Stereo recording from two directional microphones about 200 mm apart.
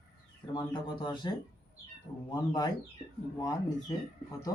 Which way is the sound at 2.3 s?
20° left (ahead or behind).